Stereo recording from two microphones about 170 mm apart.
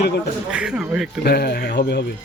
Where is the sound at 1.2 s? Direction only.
70° left (ahead or behind).